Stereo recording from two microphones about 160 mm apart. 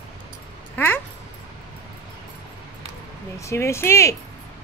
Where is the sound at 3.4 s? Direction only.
15° left (ahead or behind).